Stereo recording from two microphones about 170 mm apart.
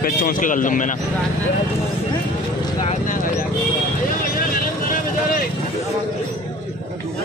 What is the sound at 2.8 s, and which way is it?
Clip-clop, 40° left (ahead or behind).